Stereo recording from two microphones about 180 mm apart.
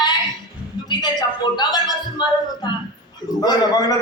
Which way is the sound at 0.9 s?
25° left (ahead or behind).